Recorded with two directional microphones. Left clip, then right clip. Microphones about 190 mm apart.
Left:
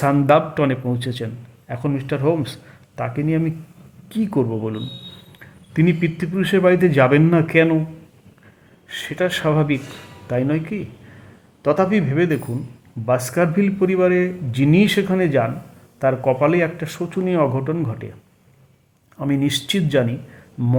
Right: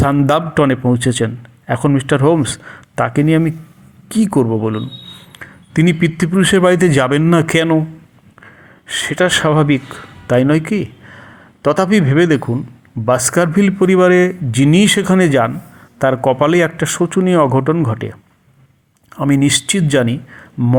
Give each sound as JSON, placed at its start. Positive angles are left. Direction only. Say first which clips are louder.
{"t": 0.0, "sound": "a man's voice", "louder": "right 1 dB", "side_deg": -15}
{"t": 8.9, "sound": "a man's voice", "louder": "right 8 dB", "side_deg": -20}
{"t": 19.1, "sound": "a man's voice", "louder": "right 7 dB", "side_deg": -20}